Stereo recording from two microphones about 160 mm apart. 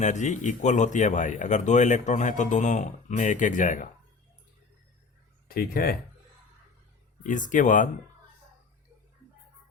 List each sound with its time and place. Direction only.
0.0 s speech: 45° left (ahead or behind)
5.5 s speech: 65° left (ahead or behind)
7.3 s speech: 55° left (ahead or behind)